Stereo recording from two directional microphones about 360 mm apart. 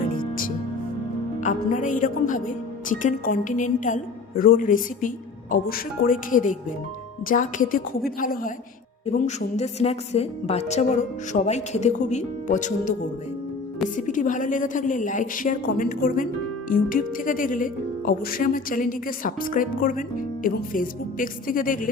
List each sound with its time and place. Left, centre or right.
0.2 s music: left
1.4 s a woman's voice: left
13.9 s speech: left